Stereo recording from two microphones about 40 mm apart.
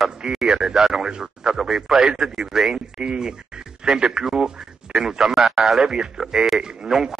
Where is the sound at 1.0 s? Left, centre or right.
Centre.